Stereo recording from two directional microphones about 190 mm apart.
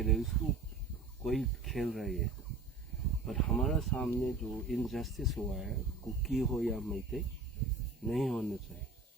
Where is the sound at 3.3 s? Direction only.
Centre (ahead or behind).